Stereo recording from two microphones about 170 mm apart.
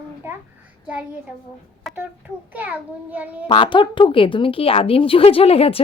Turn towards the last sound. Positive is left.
turn(degrees=35)  # may be behind; listen again after turning